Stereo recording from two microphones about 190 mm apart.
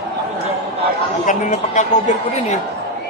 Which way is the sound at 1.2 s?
40° left (ahead or behind).